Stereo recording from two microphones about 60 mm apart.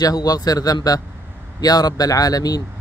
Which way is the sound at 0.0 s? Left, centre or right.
Left.